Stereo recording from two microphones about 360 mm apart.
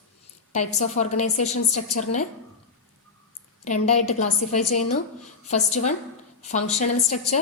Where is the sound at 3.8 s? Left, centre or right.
Centre.